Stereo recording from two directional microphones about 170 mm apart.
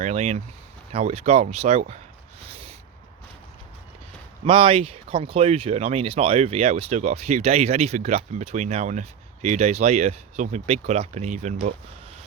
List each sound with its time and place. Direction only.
0.0 s speech: 40° right (ahead or behind)
2.4 s a sound: 35° right (ahead or behind)
4.4 s speech: 30° right (ahead or behind)